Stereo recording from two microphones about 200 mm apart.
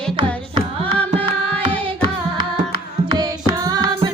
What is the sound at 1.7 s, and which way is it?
Carnatic music, 25° right (ahead or behind).